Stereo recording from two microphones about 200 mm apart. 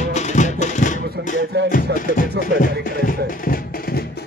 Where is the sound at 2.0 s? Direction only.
40° left (ahead or behind).